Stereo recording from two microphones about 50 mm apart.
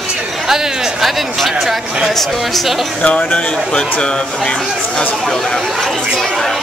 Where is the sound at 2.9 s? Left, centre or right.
Left.